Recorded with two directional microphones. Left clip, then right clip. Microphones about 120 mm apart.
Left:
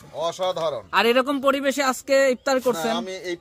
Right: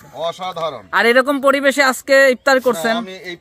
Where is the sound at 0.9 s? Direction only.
25° right (ahead or behind); by 2.7 s 50° right (ahead or behind).